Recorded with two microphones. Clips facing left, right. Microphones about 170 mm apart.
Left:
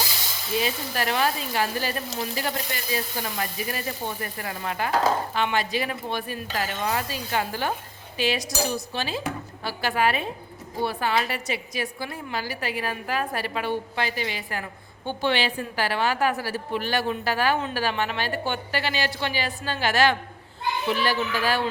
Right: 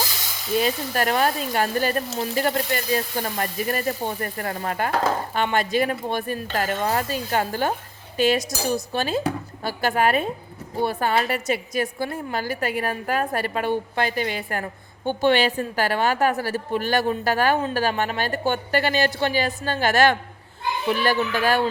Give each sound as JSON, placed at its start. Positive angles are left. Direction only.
{"t": 0.6, "sound": "a woman's voice", "side_deg": -45}